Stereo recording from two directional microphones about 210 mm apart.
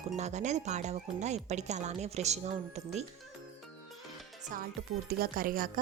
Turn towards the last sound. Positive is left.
turn(degrees=-40)  # may be behind; listen again after turning